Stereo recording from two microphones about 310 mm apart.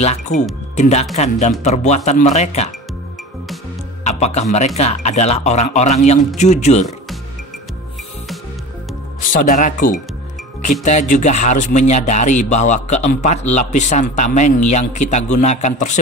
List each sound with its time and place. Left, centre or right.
0.0 s speech: left
4.0 s speech: left
9.3 s speech: left